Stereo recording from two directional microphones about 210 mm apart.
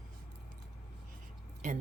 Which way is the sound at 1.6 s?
35° right (ahead or behind).